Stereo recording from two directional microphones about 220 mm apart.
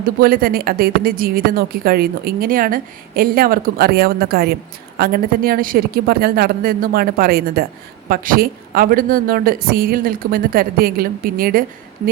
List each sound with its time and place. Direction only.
0.0 s a woman's voice: 40° right (ahead or behind)